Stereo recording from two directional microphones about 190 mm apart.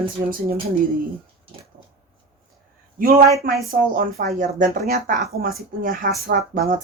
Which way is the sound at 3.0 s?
50° right (ahead or behind).